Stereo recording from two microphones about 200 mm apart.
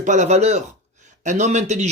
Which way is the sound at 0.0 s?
35° right (ahead or behind).